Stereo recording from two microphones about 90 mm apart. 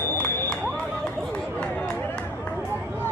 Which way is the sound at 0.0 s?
25° left (ahead or behind).